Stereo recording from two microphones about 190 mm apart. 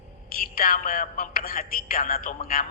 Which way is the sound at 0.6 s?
50° left (ahead or behind).